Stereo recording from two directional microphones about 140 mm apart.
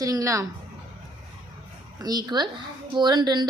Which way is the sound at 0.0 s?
25° right (ahead or behind).